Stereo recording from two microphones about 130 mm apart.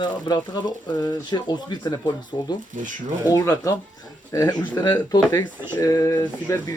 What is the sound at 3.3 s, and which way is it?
Speech, 25° left (ahead or behind).